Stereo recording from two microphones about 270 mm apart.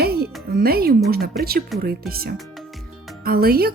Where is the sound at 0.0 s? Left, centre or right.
Right.